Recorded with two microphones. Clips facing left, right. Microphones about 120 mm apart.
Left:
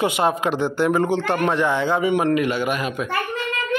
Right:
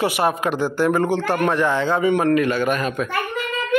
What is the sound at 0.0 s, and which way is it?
Speech, 20° left (ahead or behind).